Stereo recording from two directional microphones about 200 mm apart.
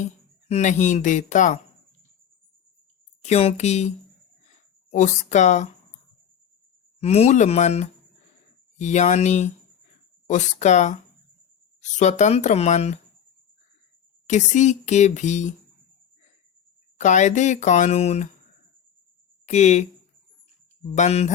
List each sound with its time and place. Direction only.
0.0 s speech: 35° left (ahead or behind)
3.2 s speech: 30° left (ahead or behind)
7.0 s speech: 30° left (ahead or behind)
14.3 s speech: 35° left (ahead or behind)
17.0 s speech: 35° left (ahead or behind)
19.5 s speech: 35° left (ahead or behind)
20.9 s speech: 35° left (ahead or behind)